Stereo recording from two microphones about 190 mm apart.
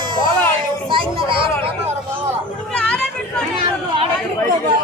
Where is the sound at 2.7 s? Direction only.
5° left (ahead or behind).